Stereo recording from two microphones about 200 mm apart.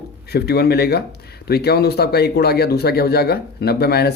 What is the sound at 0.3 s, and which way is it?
Speech, 55° left (ahead or behind).